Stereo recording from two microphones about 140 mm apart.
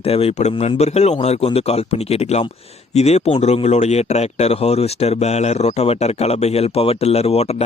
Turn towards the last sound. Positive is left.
turn(degrees=50)  # may be behind; listen again after turning